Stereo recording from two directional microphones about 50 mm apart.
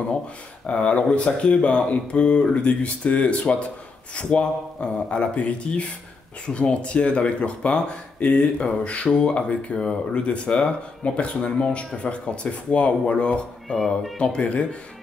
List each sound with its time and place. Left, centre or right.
0.7 s speech: left
13.7 s speech: centre
14.1 s speech: centre